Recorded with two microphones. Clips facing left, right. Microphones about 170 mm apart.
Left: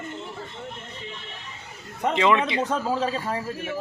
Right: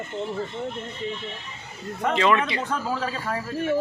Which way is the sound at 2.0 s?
20° left (ahead or behind).